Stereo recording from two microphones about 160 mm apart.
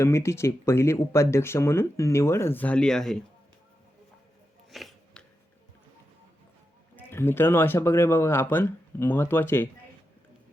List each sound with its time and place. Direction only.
0.0 s speech: 15° left (ahead or behind)
4.7 s a sound: centre (ahead or behind)
6.9 s speech: 15° left (ahead or behind)